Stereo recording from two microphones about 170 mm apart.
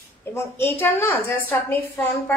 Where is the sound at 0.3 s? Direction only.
15° left (ahead or behind).